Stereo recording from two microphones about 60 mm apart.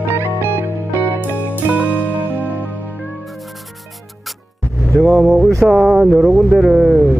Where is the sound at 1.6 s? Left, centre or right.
Right.